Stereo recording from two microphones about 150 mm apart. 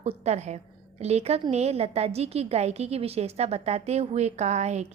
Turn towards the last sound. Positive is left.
turn(degrees=-50)  # may be behind; listen again after turning